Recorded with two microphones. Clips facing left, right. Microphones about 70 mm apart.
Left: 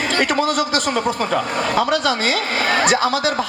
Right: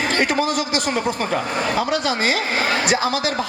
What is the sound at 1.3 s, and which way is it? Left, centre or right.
A man's voice, left.